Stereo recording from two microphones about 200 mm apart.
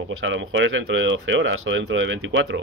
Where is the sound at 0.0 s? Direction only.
70° right (ahead or behind).